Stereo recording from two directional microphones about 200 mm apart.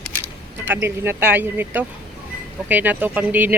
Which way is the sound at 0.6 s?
10° right (ahead or behind).